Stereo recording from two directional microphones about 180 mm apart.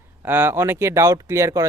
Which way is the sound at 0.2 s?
10° right (ahead or behind).